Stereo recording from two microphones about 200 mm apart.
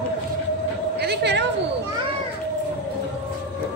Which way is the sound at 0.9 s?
55° right (ahead or behind).